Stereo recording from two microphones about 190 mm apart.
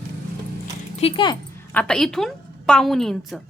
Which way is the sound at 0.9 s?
30° left (ahead or behind).